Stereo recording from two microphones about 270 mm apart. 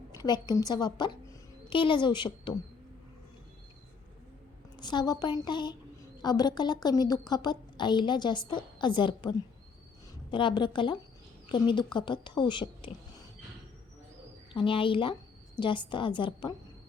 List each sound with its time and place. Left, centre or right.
0.2 s a woman's voice: centre
4.8 s a woman's voice: centre
10.3 s a woman's voice: centre
14.5 s a woman's voice: centre